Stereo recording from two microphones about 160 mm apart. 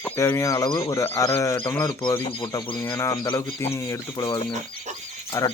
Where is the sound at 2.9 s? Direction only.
15° left (ahead or behind).